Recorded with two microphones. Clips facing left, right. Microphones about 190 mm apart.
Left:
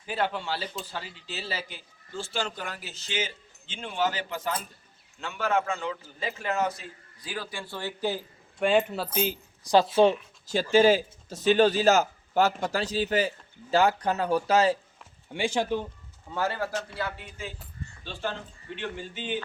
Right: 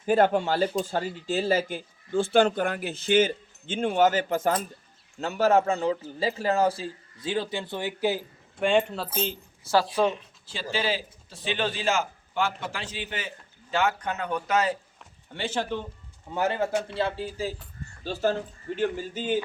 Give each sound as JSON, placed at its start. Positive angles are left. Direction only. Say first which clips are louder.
{"t": 0.0, "sound": "a man's voice", "louder": "right 9 dB", "side_deg": -45}
{"t": 8.6, "sound": "speech", "louder": "even", "side_deg": 5}
{"t": 9.7, "sound": "speech", "louder": "left 3 dB", "side_deg": 25}
{"t": 10.4, "sound": "a man's voice", "louder": "left 9 dB", "side_deg": 45}
{"t": 15.3, "sound": "speech", "louder": "left 3 dB", "side_deg": 10}
{"t": 16.3, "sound": "a man's voice", "louder": "right 4 dB", "side_deg": -20}